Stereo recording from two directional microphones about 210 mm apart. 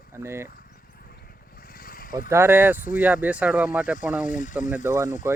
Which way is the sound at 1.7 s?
40° left (ahead or behind).